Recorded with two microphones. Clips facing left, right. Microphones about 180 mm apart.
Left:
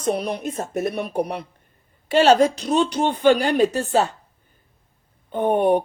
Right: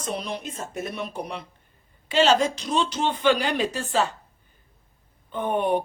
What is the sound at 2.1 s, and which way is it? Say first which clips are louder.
Speech: left 5 dB; 55° left (ahead or behind).